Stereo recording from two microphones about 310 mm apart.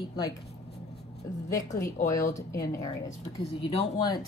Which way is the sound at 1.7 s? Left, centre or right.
Left.